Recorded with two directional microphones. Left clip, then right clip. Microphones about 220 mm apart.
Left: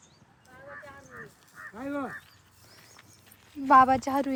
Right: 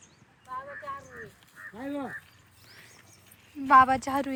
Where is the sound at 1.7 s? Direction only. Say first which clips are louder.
Left 2 dB; centre (ahead or behind).